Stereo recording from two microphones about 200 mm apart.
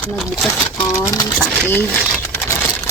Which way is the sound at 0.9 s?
20° left (ahead or behind).